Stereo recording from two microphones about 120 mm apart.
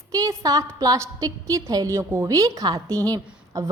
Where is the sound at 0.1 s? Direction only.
30° right (ahead or behind).